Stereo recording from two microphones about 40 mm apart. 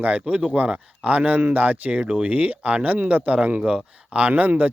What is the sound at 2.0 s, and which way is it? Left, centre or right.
Speech, right.